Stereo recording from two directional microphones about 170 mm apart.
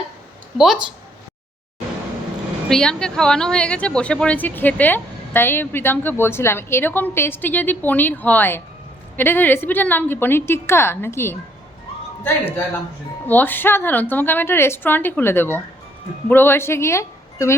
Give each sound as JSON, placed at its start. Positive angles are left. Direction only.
{"t": 0.5, "sound": "speech", "side_deg": 0}
{"t": 2.6, "sound": "a woman's voice", "side_deg": 5}
{"t": 13.2, "sound": "a woman's voice", "side_deg": 10}